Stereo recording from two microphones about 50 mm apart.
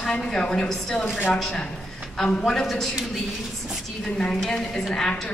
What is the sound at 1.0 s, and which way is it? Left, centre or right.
Speech, left.